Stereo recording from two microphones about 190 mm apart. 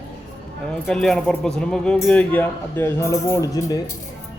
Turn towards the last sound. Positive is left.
turn(degrees=20)  # may be behind; listen again after turning